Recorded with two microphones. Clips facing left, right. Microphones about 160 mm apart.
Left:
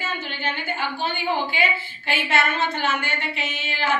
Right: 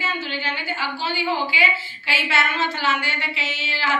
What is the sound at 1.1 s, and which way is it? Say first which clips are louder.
A woman's voice: right 3 dB; 50° left (ahead or behind).